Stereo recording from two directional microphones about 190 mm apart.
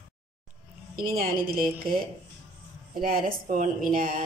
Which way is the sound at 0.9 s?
50° right (ahead or behind).